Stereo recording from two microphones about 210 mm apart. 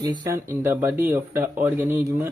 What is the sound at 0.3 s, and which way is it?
Speech, 10° right (ahead or behind).